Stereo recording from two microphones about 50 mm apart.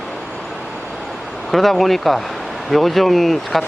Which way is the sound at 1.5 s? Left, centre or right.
Centre.